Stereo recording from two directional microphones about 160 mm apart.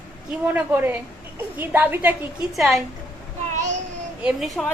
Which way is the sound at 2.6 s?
Centre (ahead or behind).